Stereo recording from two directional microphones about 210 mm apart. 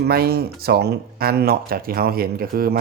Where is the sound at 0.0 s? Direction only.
45° right (ahead or behind).